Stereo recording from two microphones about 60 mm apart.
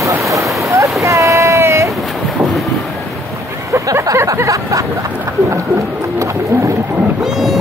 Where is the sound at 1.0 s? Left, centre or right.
Right.